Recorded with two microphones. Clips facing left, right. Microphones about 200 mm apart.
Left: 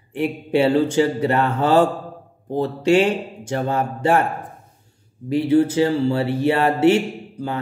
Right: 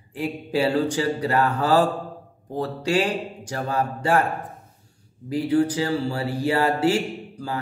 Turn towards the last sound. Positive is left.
turn(degrees=25)  # may be behind; listen again after turning